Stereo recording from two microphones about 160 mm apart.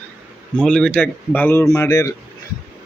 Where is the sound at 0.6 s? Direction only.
5° left (ahead or behind).